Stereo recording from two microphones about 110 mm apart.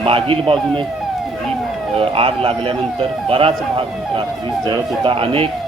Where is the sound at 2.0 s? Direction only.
55° right (ahead or behind).